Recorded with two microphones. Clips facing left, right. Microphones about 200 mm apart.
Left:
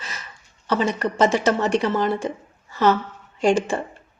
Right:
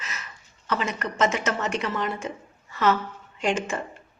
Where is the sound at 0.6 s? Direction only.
30° left (ahead or behind).